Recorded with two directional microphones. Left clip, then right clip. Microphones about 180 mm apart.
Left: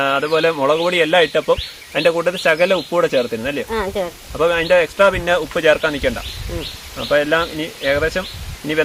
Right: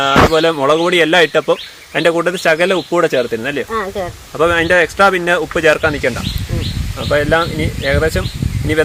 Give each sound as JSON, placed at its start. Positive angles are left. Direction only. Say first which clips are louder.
{"t": 0.0, "sound": "speech", "louder": "right 5 dB", "side_deg": -65}
{"t": 3.7, "sound": "speech", "louder": "right 1 dB", "side_deg": 0}
{"t": 4.4, "sound": "speech", "louder": "right 3 dB", "side_deg": -70}